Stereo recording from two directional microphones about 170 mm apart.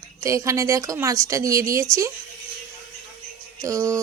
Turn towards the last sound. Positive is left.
turn(degrees=-20)  # may be behind; listen again after turning